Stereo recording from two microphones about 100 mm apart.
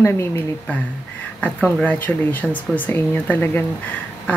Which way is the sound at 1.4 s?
15° left (ahead or behind).